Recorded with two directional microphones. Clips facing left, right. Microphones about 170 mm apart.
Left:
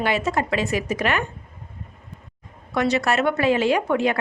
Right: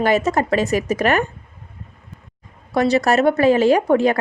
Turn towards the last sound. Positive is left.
turn(degrees=-40)  # may be behind; listen again after turning